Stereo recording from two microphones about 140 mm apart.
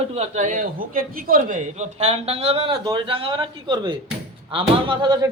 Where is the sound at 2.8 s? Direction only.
30° right (ahead or behind).